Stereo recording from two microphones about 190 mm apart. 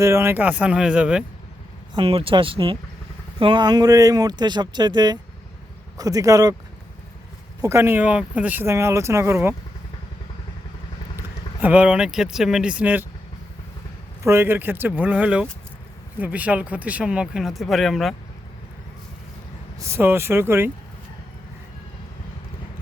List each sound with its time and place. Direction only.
0.0 s speech: 15° right (ahead or behind)
2.0 s speech: 30° right (ahead or behind)
7.6 s speech: 15° right (ahead or behind)
11.2 s speech: 10° right (ahead or behind)
14.3 s speech: 10° right (ahead or behind)
19.8 s speech: 15° right (ahead or behind)